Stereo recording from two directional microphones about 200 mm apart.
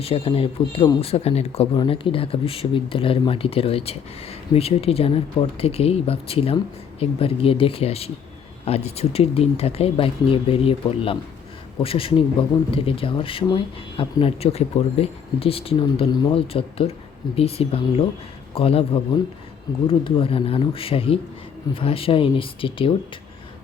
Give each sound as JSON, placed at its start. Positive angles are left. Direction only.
{"t": 0.0, "sound": "speech", "side_deg": 30}